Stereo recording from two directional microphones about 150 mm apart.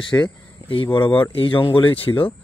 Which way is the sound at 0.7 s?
35° left (ahead or behind).